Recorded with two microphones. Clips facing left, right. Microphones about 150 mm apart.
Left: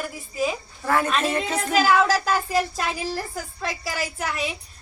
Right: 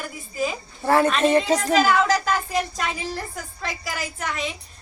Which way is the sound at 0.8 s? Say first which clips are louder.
Right 4 dB; 30° right (ahead or behind).